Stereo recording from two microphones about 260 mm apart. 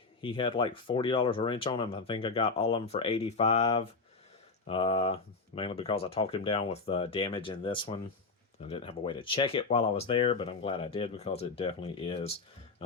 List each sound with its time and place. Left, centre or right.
0.2 s speech: centre